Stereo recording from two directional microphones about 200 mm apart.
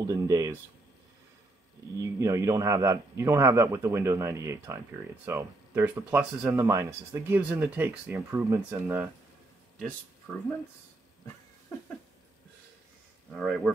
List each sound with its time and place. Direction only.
0.0 s speech: 20° right (ahead or behind)
2.0 s speech: 15° right (ahead or behind)
13.3 s speech: centre (ahead or behind)